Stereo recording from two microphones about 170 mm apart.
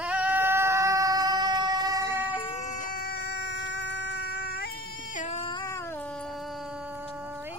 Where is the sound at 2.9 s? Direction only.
65° left (ahead or behind).